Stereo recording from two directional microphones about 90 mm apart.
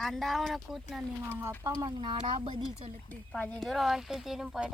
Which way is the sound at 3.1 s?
15° left (ahead or behind).